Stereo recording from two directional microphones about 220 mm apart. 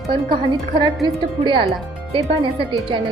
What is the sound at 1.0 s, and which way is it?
A woman's voice, 20° right (ahead or behind).